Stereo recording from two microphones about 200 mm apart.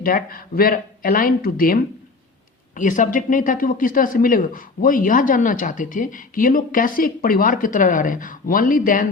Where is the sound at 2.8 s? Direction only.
40° left (ahead or behind).